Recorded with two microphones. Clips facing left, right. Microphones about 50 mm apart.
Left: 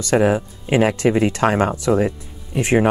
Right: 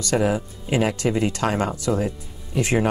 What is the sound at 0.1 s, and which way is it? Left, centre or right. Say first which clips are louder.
Speech: left 5 dB; left.